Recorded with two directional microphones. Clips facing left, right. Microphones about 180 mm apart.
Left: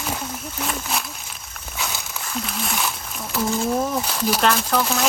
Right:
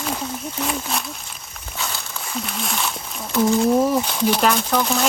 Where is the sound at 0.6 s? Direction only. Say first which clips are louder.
Right 2 dB; centre (ahead or behind).